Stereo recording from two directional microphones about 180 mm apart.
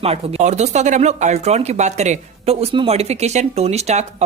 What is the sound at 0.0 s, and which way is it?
Speech, 35° right (ahead or behind).